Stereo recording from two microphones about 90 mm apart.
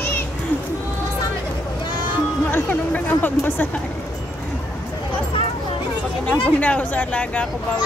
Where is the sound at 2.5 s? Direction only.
20° left (ahead or behind).